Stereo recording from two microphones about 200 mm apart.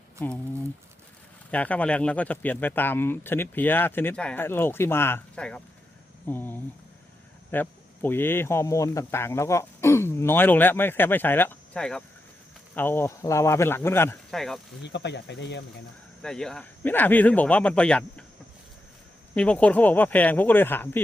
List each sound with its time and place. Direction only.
1.5 s speech: 5° left (ahead or behind)
14.8 s speech: 60° left (ahead or behind)
16.2 s speech: 5° left (ahead or behind)
19.3 s speech: 5° left (ahead or behind)